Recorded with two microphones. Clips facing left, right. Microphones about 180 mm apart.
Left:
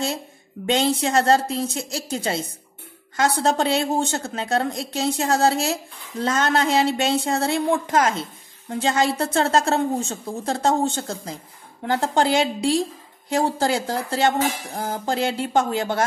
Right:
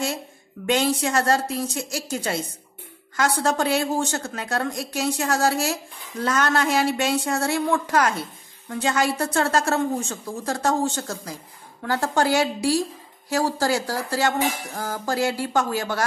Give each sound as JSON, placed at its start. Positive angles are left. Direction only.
{"t": 0.6, "sound": "a woman's voice", "side_deg": 20}